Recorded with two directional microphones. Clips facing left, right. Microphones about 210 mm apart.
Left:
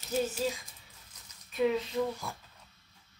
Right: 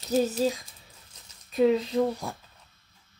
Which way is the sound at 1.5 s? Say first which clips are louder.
Right 7 dB; 35° right (ahead or behind).